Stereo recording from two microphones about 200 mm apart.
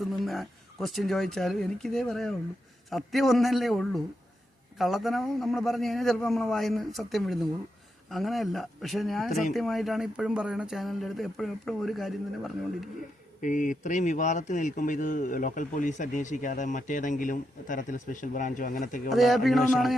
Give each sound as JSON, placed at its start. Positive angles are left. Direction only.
{"t": 0.0, "sound": "speech", "side_deg": 0}
{"t": 13.4, "sound": "speech", "side_deg": 40}
{"t": 19.1, "sound": "speech", "side_deg": 0}